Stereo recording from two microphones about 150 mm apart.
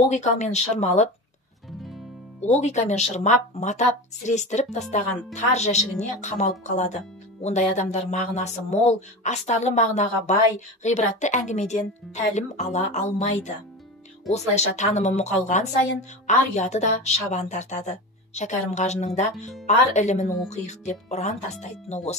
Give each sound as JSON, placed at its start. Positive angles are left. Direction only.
{"t": 0.1, "sound": "a woman's voice", "side_deg": 50}
{"t": 2.4, "sound": "a woman's voice", "side_deg": 50}